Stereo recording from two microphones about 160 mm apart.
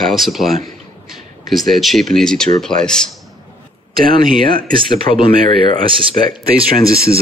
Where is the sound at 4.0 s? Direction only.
60° right (ahead or behind).